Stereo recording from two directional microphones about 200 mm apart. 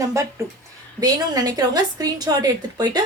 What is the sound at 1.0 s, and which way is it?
A woman's voice, 20° right (ahead or behind).